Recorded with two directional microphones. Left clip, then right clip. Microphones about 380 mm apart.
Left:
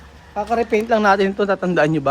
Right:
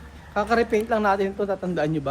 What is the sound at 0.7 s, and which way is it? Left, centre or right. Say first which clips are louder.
Speech: left 6 dB; left.